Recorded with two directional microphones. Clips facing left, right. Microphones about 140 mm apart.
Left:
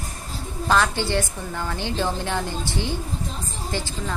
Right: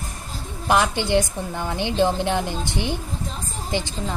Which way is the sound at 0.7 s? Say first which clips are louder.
Right 2 dB; 15° right (ahead or behind).